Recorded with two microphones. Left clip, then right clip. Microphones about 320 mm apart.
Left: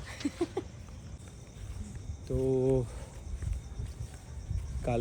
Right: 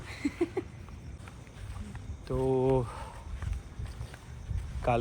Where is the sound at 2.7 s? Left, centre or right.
Centre.